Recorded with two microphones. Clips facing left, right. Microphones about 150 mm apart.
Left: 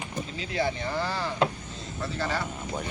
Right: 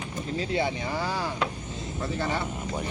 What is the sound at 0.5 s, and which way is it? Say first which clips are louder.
Speech: left 1 dB; 15° right (ahead or behind).